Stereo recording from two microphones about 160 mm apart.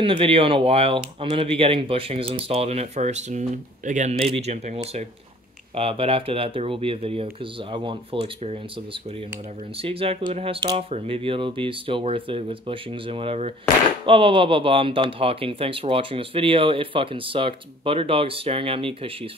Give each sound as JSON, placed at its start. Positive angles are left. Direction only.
{"t": 0.0, "sound": "speech", "side_deg": -35}
{"t": 5.8, "sound": "speech", "side_deg": -35}
{"t": 9.8, "sound": "speech", "side_deg": -35}